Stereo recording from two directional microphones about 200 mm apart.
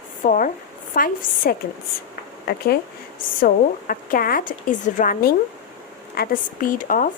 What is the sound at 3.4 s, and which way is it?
Speech, 45° left (ahead or behind).